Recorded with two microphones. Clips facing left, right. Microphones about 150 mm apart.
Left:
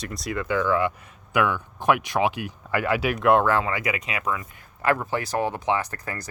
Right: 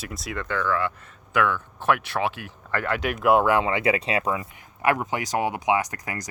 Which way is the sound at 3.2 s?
10° right (ahead or behind).